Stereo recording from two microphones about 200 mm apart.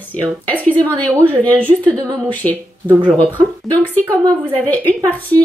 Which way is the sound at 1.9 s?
20° right (ahead or behind).